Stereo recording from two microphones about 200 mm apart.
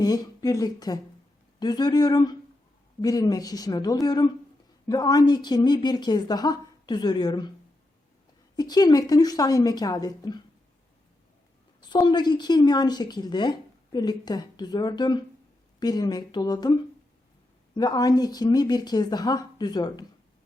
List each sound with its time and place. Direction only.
0.0 s a woman's voice: 20° left (ahead or behind)
8.5 s a woman's voice: 20° left (ahead or behind)
12.0 s a woman's voice: 20° left (ahead or behind)
17.7 s a woman's voice: 20° left (ahead or behind)